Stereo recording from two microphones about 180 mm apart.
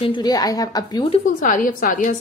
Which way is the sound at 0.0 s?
25° left (ahead or behind).